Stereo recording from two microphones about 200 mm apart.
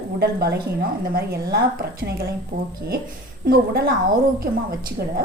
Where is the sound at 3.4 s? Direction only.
50° right (ahead or behind).